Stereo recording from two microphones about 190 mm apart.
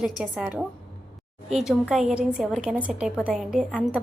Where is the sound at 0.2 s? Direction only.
5° right (ahead or behind).